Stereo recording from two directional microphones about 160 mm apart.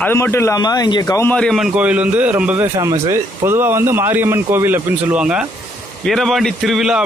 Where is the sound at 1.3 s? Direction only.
5° left (ahead or behind).